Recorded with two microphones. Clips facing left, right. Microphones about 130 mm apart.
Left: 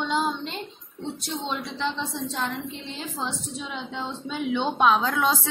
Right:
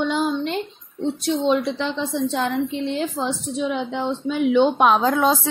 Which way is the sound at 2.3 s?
70° right (ahead or behind).